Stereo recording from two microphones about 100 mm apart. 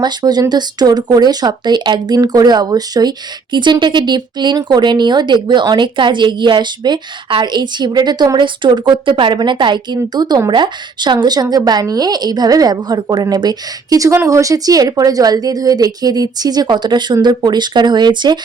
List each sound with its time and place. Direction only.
0.0 s a woman's voice: 45° right (ahead or behind)